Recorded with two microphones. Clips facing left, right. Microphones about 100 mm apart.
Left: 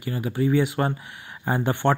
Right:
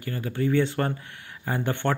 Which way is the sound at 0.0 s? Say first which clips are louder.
Left 3 dB; 15° left (ahead or behind).